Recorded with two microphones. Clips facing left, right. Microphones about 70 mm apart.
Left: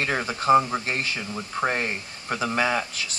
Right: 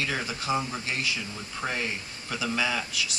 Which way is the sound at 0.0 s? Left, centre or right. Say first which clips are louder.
Left 6 dB; left.